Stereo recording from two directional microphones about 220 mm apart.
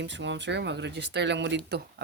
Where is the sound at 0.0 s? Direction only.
55° right (ahead or behind).